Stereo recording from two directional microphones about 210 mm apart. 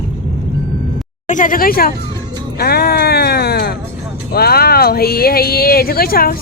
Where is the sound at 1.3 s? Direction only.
40° left (ahead or behind).